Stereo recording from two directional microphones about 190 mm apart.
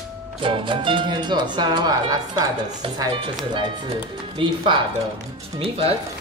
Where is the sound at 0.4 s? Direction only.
25° right (ahead or behind).